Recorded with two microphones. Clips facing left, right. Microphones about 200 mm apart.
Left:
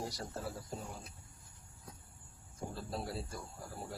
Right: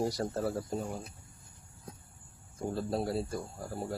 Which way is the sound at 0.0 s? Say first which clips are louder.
Right 10 dB; 55° right (ahead or behind).